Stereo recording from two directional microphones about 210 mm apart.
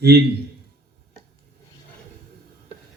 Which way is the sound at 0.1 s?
50° right (ahead or behind).